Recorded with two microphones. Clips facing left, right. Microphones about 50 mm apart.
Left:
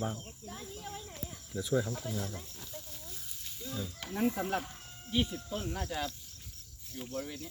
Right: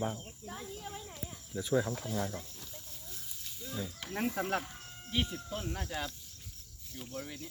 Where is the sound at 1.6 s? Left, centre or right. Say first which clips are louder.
Right 1 dB; right.